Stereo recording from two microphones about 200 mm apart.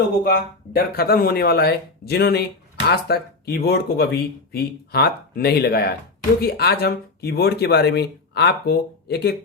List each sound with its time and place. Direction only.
0.3 s speech: 50° left (ahead or behind)